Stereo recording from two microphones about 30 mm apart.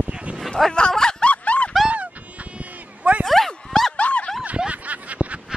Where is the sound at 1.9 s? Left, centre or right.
Right.